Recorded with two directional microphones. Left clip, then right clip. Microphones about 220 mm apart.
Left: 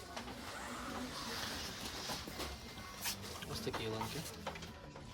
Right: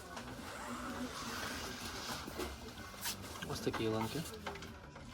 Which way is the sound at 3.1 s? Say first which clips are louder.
Right 2 dB; centre (ahead or behind).